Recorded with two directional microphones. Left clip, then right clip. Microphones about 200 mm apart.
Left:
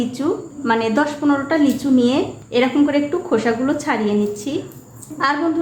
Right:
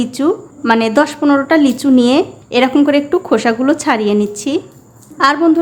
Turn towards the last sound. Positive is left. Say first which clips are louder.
# right 7 dB
turn(degrees=-45)  # may be behind; listen again after turning